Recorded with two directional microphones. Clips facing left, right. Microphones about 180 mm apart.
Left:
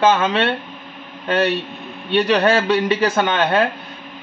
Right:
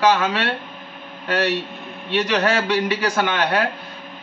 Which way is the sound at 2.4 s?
30° left (ahead or behind).